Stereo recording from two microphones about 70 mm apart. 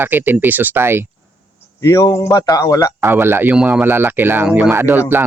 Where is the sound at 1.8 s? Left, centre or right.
Left.